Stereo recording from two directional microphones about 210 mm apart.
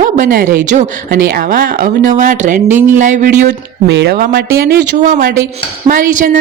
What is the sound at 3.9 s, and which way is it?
Speech, 55° right (ahead or behind).